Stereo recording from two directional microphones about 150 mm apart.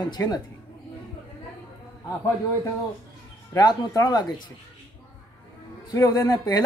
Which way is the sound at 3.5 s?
25° left (ahead or behind).